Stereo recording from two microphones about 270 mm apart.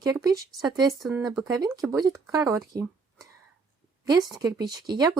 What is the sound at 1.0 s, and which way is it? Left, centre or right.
Speech, centre.